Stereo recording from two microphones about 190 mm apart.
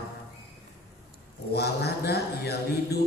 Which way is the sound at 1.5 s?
55° left (ahead or behind).